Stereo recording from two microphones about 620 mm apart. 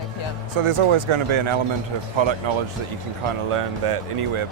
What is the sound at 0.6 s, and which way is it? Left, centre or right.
Speech, right.